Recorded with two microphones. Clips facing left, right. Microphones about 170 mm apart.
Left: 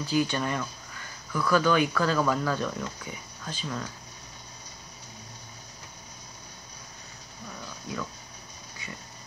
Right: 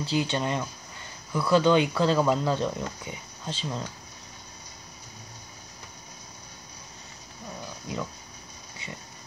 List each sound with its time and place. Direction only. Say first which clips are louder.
0.0 s speech: even; 25° right (ahead or behind)